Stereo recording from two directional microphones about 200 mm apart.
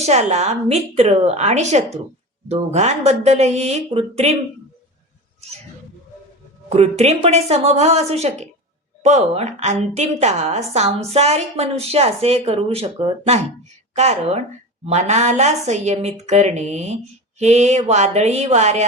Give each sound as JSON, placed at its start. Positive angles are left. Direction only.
{"t": 0.0, "sound": "a woman's voice", "side_deg": -35}
{"t": 6.7, "sound": "a woman's voice", "side_deg": -30}